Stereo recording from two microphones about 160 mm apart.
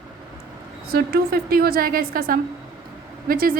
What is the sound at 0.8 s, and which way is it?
A woman's voice, 75° right (ahead or behind).